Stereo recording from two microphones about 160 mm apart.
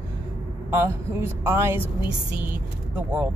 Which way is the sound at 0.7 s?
15° right (ahead or behind).